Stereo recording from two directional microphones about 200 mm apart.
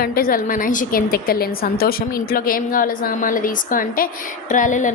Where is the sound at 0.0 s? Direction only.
45° left (ahead or behind).